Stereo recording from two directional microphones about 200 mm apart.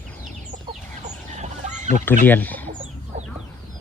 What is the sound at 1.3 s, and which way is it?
Fowl, 35° right (ahead or behind).